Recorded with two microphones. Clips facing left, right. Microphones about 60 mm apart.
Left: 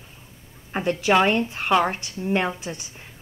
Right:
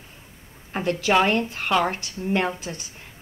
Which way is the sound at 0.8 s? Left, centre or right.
Centre.